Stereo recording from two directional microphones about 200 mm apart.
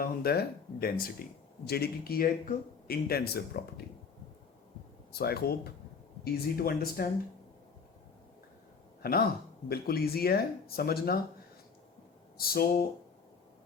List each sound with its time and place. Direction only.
0.0 s speech: 50° left (ahead or behind)
5.1 s speech: 50° left (ahead or behind)
9.0 s speech: 50° left (ahead or behind)
12.4 s speech: 50° left (ahead or behind)